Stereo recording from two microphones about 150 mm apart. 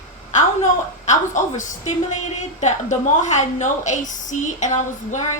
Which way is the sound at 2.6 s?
55° left (ahead or behind).